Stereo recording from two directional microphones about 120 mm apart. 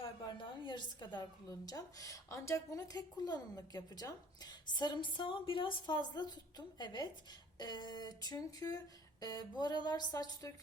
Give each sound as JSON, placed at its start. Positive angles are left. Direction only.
{"t": 0.0, "sound": "a woman's voice", "side_deg": 45}